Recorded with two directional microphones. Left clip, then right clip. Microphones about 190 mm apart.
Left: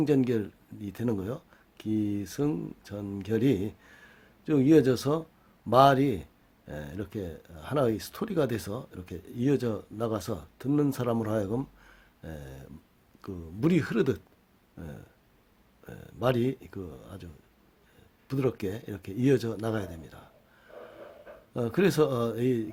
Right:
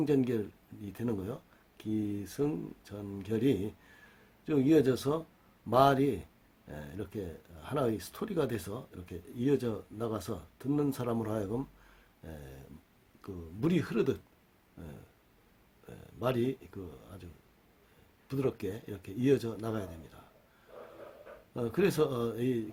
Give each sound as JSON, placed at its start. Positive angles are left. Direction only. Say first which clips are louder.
{"t": 0.0, "sound": "speech", "louder": "left 4 dB", "side_deg": 30}
{"t": 15.9, "sound": "speech", "louder": "left 5 dB", "side_deg": 35}
{"t": 18.3, "sound": "speech", "louder": "left 4 dB", "side_deg": 35}
{"t": 21.5, "sound": "speech", "louder": "left 4 dB", "side_deg": 35}